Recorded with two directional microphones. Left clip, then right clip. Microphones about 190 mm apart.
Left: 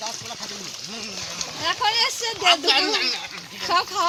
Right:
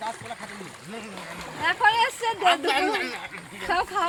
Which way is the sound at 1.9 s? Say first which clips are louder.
Even; 45° left (ahead or behind).